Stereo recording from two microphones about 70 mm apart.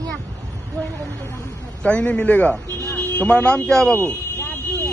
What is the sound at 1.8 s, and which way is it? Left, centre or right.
A man's voice, centre.